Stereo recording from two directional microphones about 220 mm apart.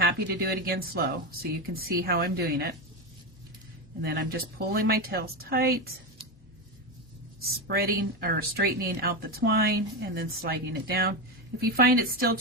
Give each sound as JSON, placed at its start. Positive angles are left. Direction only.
{"t": 0.0, "sound": "speech", "side_deg": -45}
{"t": 4.0, "sound": "speech", "side_deg": -45}
{"t": 7.4, "sound": "speech", "side_deg": -45}